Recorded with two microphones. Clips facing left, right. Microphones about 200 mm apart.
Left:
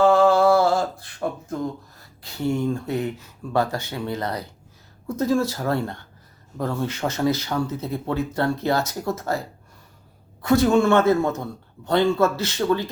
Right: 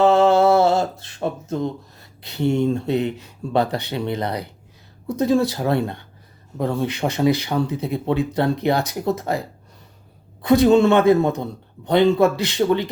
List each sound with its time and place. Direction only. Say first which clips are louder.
0.0 s a sound: right 1 dB; 20° right (ahead or behind)
5.0 s speech: right 3 dB; 15° right (ahead or behind)
10.4 s speech: right 4 dB; 15° right (ahead or behind)